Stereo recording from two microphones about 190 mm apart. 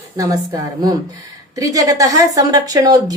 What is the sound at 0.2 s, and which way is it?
Speech, 20° right (ahead or behind).